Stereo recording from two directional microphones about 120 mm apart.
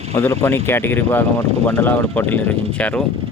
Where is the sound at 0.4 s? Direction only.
20° left (ahead or behind).